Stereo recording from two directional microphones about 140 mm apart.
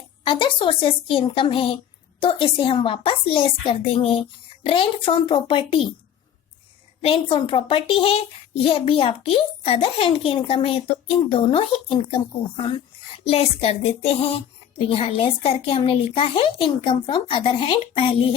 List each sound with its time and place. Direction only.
0.3 s speech: 40° left (ahead or behind)
7.0 s speech: 40° left (ahead or behind)
13.2 s speech: 45° left (ahead or behind)